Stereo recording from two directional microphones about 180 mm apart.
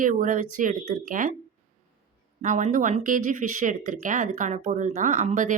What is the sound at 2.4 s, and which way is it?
A woman's voice, 40° right (ahead or behind).